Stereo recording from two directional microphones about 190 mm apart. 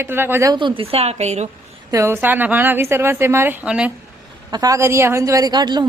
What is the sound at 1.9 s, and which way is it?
A woman's voice, 15° right (ahead or behind).